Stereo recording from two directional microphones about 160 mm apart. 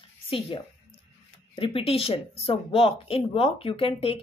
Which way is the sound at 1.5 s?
35° left (ahead or behind).